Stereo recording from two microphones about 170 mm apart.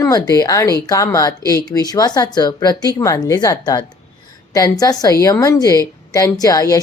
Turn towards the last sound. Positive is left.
turn(degrees=20)  # may be behind; listen again after turning